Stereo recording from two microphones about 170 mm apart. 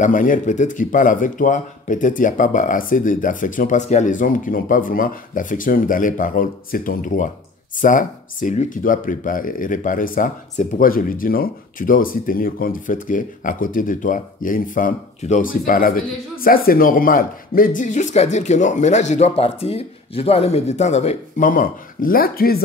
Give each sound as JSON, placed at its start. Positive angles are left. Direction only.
{"t": 0.0, "sound": "speech", "side_deg": 50}